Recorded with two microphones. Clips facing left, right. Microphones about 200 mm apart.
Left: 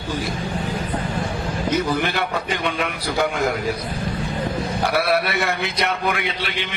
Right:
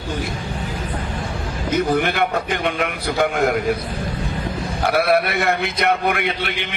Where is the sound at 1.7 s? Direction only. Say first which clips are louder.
Right 4 dB; 55° right (ahead or behind).